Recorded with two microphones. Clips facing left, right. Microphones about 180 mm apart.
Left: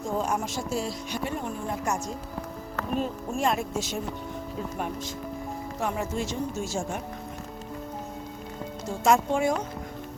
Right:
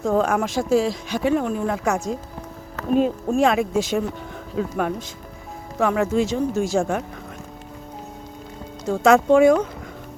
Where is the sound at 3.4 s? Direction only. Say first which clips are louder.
Right 8 dB; 80° right.